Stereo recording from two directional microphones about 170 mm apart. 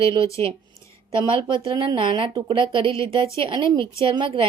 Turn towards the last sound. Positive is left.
turn(degrees=-30)  # may be behind; listen again after turning